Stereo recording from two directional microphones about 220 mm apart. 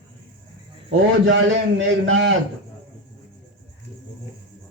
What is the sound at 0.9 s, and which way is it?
A man's voice, 60° right (ahead or behind).